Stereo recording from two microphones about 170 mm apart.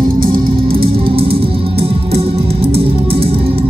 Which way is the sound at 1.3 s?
70° right (ahead or behind).